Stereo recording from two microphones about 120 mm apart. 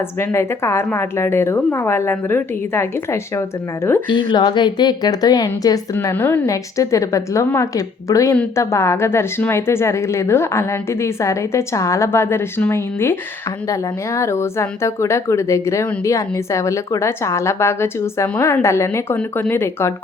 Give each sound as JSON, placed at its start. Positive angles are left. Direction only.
{"t": 0.2, "sound": "speech", "side_deg": 20}
{"t": 4.1, "sound": "a woman's voice", "side_deg": 40}
{"t": 6.5, "sound": "speech", "side_deg": 25}
{"t": 14.2, "sound": "speech", "side_deg": 20}